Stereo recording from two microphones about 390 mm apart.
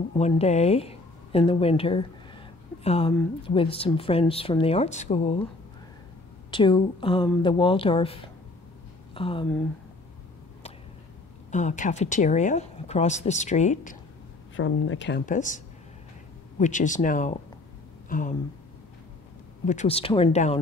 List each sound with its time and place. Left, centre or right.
0.2 s speech: centre
6.5 s speech: centre
11.5 s speech: centre
14.6 s speech: left
19.6 s speech: centre